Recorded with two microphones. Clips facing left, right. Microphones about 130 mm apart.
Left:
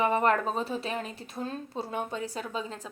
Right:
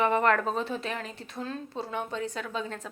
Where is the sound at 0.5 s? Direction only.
35° left (ahead or behind).